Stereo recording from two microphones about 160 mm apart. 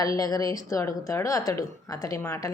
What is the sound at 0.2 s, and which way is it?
A woman's voice, 20° left (ahead or behind).